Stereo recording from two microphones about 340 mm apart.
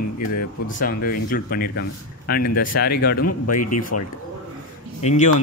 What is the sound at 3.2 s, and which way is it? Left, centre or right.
Speech, left.